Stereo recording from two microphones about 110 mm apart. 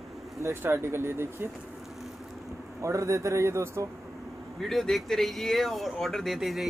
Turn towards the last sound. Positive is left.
turn(degrees=0)  # may be behind; listen again after turning